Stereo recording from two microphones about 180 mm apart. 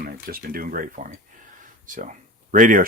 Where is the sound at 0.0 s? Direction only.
55° right (ahead or behind).